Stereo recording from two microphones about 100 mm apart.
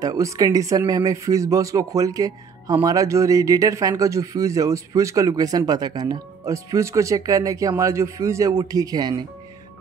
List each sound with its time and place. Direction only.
0.0 s speech: 35° right (ahead or behind)